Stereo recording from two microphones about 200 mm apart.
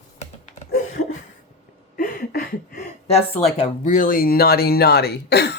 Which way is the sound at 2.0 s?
45° left (ahead or behind).